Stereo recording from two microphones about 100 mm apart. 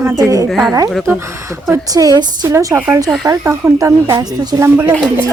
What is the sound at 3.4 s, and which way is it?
Speech, 35° right (ahead or behind).